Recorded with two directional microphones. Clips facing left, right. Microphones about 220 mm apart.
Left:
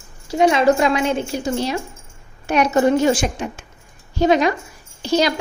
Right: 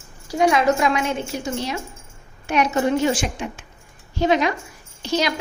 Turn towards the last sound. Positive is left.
turn(degrees=35)  # may be behind; listen again after turning